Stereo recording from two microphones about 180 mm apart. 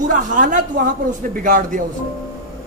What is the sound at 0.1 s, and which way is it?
A man's voice, 45° right (ahead or behind).